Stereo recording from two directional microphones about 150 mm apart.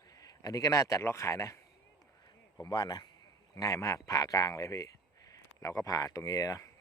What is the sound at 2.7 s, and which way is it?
Speech, 30° left (ahead or behind).